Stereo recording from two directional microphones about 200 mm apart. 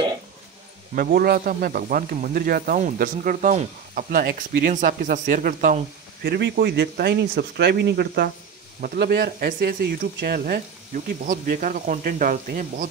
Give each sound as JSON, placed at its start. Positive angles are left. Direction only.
{"t": 0.9, "sound": "speech", "side_deg": -50}